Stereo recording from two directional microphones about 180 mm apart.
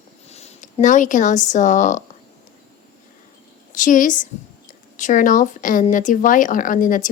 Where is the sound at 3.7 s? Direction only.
45° left (ahead or behind).